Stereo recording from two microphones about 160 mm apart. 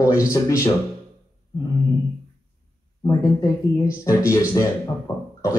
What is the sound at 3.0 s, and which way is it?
Speech, 20° left (ahead or behind).